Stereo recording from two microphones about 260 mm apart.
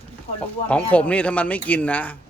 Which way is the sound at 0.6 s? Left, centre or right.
Centre.